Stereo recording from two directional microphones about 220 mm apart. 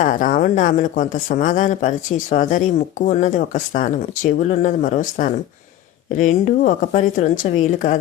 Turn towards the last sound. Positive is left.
turn(degrees=35)  # may be behind; listen again after turning